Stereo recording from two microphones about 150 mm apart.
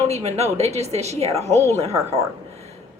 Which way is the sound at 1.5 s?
20° right (ahead or behind).